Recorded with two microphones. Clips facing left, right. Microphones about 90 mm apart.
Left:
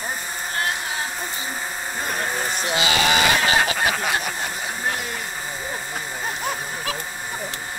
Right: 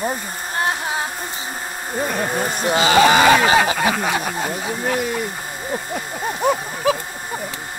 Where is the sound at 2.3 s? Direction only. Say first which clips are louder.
Right 5 dB; 50° right (ahead or behind).